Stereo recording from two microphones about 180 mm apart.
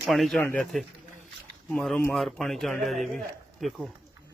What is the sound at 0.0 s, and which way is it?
Speech, centre (ahead or behind).